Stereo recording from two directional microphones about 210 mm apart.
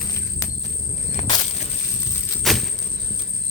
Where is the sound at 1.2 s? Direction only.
35° left (ahead or behind).